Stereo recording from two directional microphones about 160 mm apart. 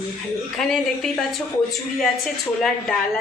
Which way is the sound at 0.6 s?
Centre (ahead or behind).